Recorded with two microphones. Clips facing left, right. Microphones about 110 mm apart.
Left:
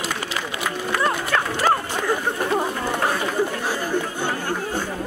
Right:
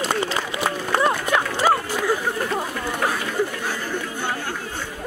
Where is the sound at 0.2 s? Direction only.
30° right (ahead or behind).